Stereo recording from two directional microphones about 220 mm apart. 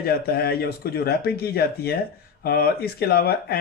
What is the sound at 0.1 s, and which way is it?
Speech, 45° left (ahead or behind).